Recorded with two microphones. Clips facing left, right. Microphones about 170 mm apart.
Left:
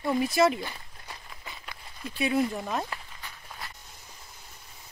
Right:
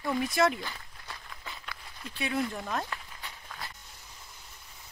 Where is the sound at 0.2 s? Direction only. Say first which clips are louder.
Left 3 dB; 5° left (ahead or behind).